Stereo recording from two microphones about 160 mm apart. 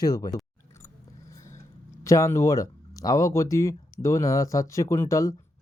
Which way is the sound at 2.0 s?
20° left (ahead or behind).